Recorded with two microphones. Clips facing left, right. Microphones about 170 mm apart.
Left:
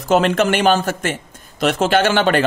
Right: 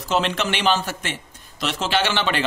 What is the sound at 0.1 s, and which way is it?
Speech, 50° left (ahead or behind).